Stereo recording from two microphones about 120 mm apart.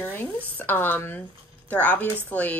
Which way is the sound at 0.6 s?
15° left (ahead or behind).